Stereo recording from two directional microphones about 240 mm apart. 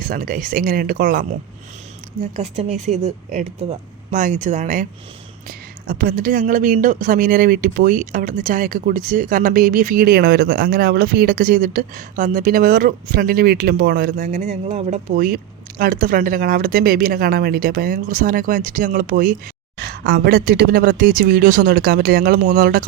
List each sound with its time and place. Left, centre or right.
0.0 s speech: right
2.3 s a woman's voice: right